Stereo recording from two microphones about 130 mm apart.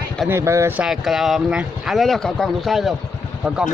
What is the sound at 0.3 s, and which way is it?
Speech, 20° right (ahead or behind).